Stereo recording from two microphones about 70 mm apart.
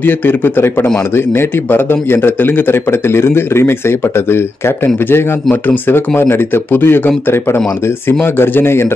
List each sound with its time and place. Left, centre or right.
0.0 s speech: left